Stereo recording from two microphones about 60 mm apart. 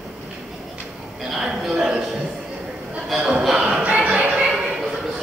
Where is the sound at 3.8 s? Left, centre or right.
Right.